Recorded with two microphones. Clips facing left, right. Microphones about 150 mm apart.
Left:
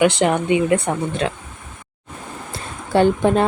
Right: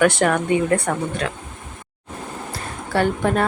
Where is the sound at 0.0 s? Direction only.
20° left (ahead or behind).